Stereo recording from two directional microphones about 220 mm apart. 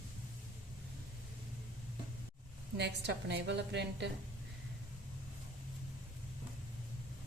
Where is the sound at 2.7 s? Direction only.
50° right (ahead or behind).